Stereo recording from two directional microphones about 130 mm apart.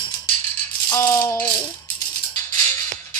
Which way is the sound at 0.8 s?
20° left (ahead or behind).